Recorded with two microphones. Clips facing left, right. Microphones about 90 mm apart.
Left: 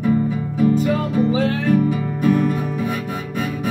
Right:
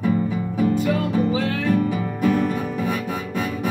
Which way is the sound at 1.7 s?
10° left (ahead or behind).